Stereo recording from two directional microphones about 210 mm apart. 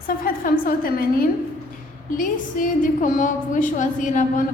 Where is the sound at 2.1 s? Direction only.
40° left (ahead or behind).